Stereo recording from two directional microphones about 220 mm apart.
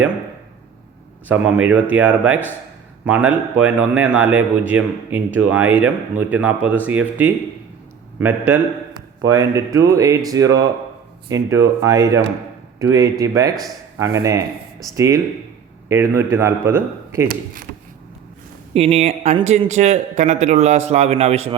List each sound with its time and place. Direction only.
1.3 s speech: 5° right (ahead or behind)
17.2 s a man's voice: 40° right (ahead or behind)
18.7 s a man's voice: 25° right (ahead or behind)